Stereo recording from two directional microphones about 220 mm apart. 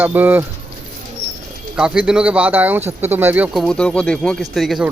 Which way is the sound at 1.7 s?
5° right (ahead or behind).